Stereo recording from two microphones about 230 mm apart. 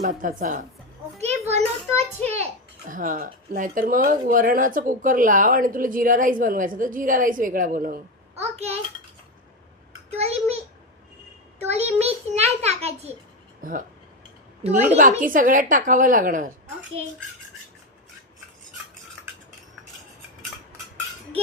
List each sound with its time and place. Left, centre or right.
0.0 s a woman's voice: right
1.2 s a sound: right
2.9 s a woman's voice: right
10.2 s a child's voice: right
11.7 s a child's voice: right
13.6 s speech: right
14.7 s a woman's voice: centre
14.9 s a woman's voice: right